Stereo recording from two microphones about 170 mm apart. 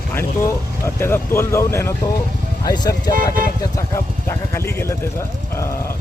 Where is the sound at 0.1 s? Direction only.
15° left (ahead or behind).